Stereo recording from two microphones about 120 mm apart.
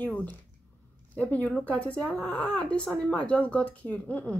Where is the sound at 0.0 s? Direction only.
15° left (ahead or behind).